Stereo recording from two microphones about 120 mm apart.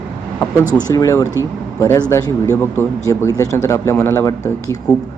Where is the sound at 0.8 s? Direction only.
30° left (ahead or behind).